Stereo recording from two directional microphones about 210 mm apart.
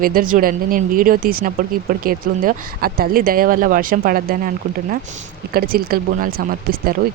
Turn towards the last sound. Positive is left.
turn(degrees=-45)  # may be behind; listen again after turning